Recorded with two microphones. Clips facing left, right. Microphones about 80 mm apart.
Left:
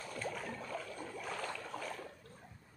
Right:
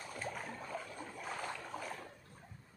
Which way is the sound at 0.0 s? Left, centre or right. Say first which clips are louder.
Left 2 dB; centre.